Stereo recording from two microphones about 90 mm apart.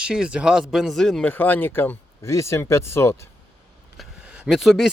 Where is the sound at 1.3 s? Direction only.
20° left (ahead or behind).